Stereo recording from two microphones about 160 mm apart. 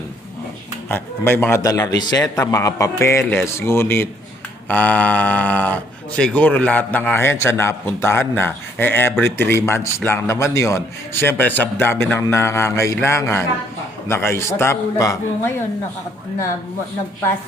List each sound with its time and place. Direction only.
0.9 s speech: 15° left (ahead or behind)